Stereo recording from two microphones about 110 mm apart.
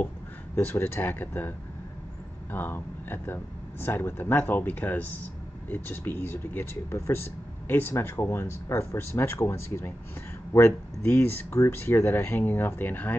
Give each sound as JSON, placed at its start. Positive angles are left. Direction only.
{"t": 0.6, "sound": "speech", "side_deg": 20}
{"t": 2.5, "sound": "speech", "side_deg": 20}